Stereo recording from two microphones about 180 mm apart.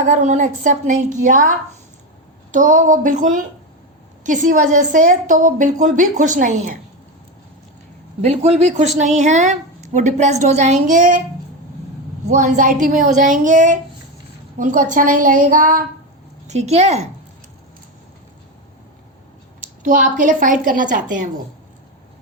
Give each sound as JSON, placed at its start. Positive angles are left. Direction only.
{"t": 0.1, "sound": "a woman's voice", "side_deg": -45}
{"t": 8.2, "sound": "a woman's voice", "side_deg": -35}
{"t": 12.3, "sound": "a woman's voice", "side_deg": -45}
{"t": 19.6, "sound": "a woman's voice", "side_deg": -50}